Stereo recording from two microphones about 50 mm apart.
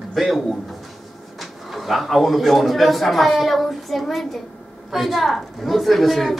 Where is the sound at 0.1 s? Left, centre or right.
Centre.